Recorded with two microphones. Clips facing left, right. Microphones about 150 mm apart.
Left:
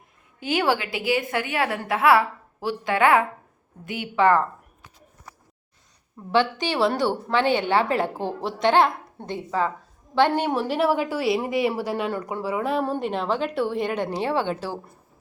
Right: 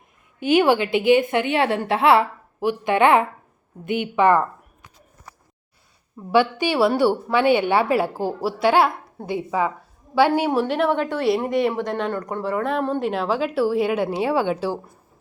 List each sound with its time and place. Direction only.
0.3 s a woman's voice: 20° right (ahead or behind)
6.3 s a woman's voice: 10° right (ahead or behind)